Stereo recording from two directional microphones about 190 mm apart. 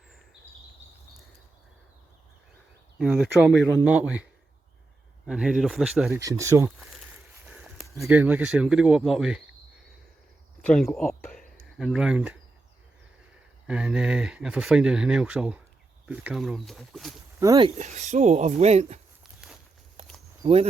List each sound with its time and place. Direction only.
3.0 s speech: 5° right (ahead or behind)
6.1 s speech: 15° right (ahead or behind)
7.4 s a sound: 5° right (ahead or behind)
8.0 s speech: 10° right (ahead or behind)
10.6 s a sound: 5° left (ahead or behind)
11.8 s speech: 5° right (ahead or behind)
13.7 s speech: 5° right (ahead or behind)
17.4 s speech: 20° right (ahead or behind)
17.7 s speech: 40° right (ahead or behind)
19.2 s walk: 5° right (ahead or behind)
20.4 s speech: 30° right (ahead or behind)